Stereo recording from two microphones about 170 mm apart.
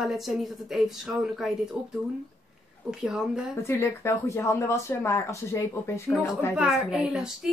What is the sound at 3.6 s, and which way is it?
Speech, 15° left (ahead or behind).